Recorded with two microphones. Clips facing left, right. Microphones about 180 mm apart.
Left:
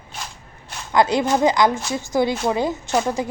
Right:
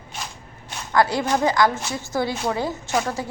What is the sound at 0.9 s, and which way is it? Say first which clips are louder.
A woman's voice: left 2 dB; 20° left (ahead or behind).